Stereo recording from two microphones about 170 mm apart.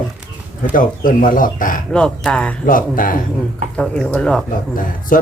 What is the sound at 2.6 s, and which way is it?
Speech, 55° left (ahead or behind).